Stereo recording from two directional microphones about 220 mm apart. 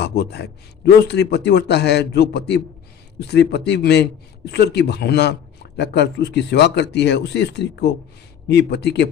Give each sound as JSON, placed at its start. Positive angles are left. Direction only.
{"t": 0.0, "sound": "a man's voice", "side_deg": 50}